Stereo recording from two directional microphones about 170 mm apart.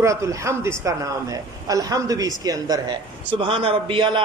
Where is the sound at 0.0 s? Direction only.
20° right (ahead or behind).